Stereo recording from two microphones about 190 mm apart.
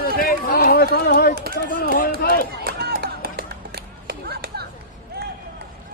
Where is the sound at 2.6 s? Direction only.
55° right (ahead or behind).